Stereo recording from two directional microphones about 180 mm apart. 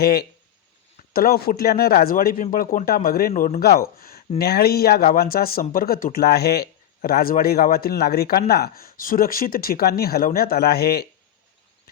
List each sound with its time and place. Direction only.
0.0 s speech: 60° left (ahead or behind)